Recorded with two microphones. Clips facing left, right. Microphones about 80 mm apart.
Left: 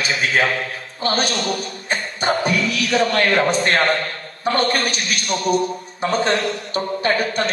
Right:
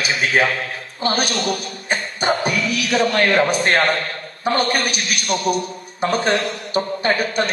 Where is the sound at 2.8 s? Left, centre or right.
Centre.